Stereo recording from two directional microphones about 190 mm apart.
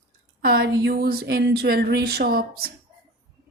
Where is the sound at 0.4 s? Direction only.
55° right (ahead or behind).